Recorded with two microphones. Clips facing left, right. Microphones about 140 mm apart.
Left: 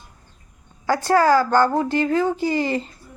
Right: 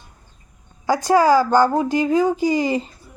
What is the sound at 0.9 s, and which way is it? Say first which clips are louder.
Speech: right 2 dB; 15° right (ahead or behind).